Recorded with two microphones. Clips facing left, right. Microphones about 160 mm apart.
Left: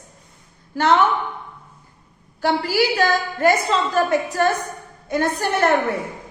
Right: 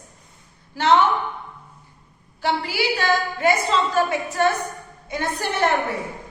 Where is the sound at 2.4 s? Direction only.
40° left (ahead or behind).